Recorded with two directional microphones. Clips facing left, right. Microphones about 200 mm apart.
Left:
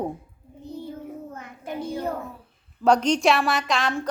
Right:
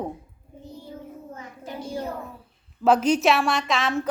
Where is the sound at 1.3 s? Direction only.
60° left (ahead or behind).